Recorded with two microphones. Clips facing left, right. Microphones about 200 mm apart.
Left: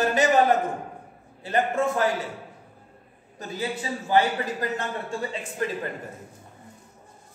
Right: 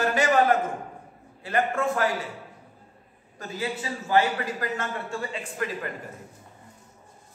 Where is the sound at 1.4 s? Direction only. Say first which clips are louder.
Left 2 dB; 20° left (ahead or behind).